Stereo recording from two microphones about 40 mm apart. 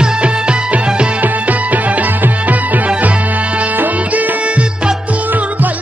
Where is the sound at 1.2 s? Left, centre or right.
Right.